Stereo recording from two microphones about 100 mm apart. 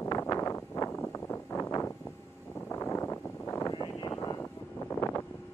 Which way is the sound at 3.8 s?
45° left (ahead or behind).